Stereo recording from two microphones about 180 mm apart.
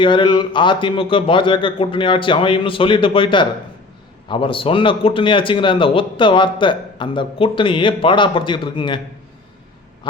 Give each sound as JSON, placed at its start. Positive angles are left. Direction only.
{"t": 0.0, "sound": "a man's voice", "side_deg": 25}